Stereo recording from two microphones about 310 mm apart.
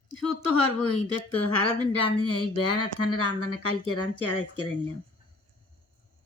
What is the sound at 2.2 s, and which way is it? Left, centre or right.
Speech, left.